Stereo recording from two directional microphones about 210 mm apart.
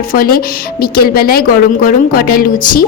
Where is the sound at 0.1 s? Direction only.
45° left (ahead or behind).